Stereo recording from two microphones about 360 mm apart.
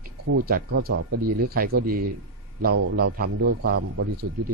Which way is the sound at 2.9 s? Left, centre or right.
Right.